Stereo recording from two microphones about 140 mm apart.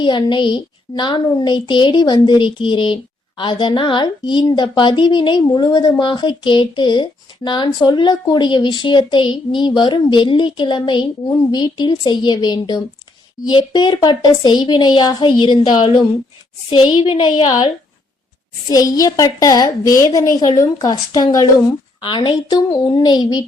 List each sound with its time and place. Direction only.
0.0 s a woman's voice: 35° left (ahead or behind)
18.7 s a woman's voice: 25° left (ahead or behind)